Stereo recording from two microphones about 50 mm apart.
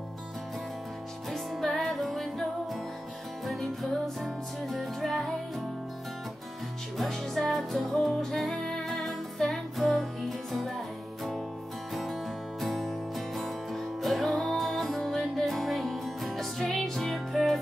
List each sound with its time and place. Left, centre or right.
1.5 s music: centre
7.0 s music: centre
11.9 s music: centre